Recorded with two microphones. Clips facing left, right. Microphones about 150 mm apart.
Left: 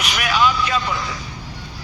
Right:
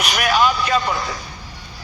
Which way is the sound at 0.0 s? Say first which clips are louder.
Right 2 dB; 40° right (ahead or behind).